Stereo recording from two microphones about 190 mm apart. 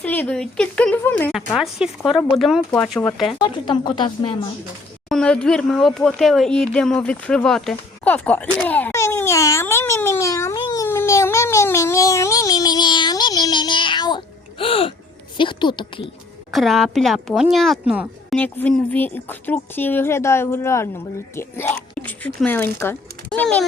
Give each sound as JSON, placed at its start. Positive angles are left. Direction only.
{"t": 0.0, "sound": "speech", "side_deg": 10}
{"t": 1.5, "sound": "speech", "side_deg": -5}
{"t": 3.3, "sound": "a woman's voice", "side_deg": 25}
{"t": 5.0, "sound": "a woman's voice", "side_deg": 5}
{"t": 16.5, "sound": "speech", "side_deg": 0}
{"t": 18.3, "sound": "speech", "side_deg": 10}
{"t": 21.9, "sound": "a sound", "side_deg": 10}
{"t": 22.4, "sound": "speech", "side_deg": 10}